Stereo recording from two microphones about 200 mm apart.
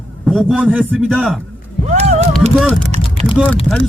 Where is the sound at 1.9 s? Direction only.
35° right (ahead or behind).